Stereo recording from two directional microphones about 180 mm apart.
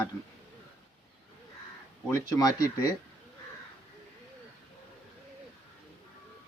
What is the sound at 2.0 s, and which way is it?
Speech, 15° left (ahead or behind).